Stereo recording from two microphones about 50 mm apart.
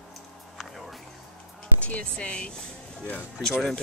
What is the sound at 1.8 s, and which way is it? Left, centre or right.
Speech, left.